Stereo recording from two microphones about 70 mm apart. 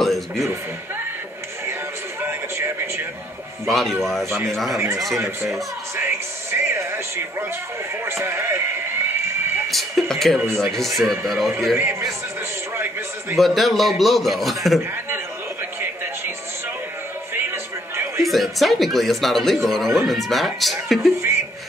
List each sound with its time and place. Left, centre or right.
0.0 s music: centre
2.2 s a sound: right
3.6 s speech: centre
4.3 s a man's voice: right
9.7 s speech: centre
10.4 s a man's voice: right
10.7 s speech: centre
11.7 s a man's voice: right
13.4 s speech: centre
17.3 s music: right
18.2 s speech: centre
21.2 s a sound: right